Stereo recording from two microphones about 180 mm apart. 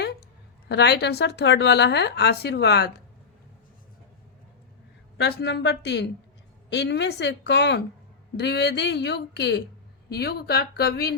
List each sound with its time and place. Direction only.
0.7 s a woman's voice: 65° left (ahead or behind)
5.1 s a woman's voice: 70° left (ahead or behind)